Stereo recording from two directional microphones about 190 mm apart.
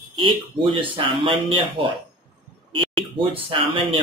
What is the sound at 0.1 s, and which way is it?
Speech, 25° right (ahead or behind).